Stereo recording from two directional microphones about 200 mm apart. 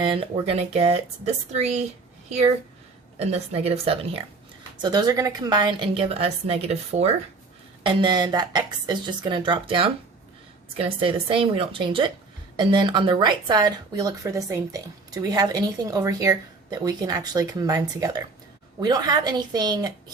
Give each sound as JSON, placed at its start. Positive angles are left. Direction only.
{"t": 0.0, "sound": "speech", "side_deg": -25}
{"t": 3.2, "sound": "a woman's voice", "side_deg": -30}
{"t": 4.8, "sound": "speech", "side_deg": -20}